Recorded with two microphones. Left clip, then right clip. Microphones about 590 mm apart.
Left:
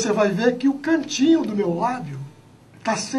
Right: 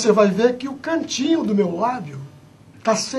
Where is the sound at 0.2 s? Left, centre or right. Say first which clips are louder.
Right 3 dB; right.